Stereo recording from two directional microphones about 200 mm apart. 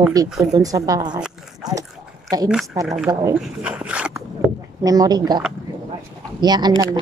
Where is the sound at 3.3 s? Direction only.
5° right (ahead or behind).